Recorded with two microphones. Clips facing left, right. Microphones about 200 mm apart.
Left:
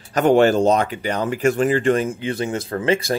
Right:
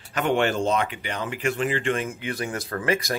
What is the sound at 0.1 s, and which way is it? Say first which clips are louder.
Speech: left 8 dB; 40° left (ahead or behind).